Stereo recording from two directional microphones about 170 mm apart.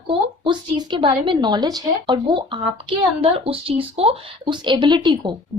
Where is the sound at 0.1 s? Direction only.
30° right (ahead or behind).